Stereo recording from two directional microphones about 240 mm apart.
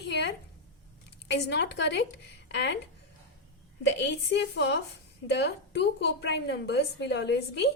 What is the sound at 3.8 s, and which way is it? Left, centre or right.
A woman's voice, left.